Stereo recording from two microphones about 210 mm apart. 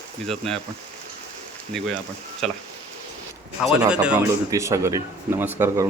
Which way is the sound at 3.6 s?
5° right (ahead or behind).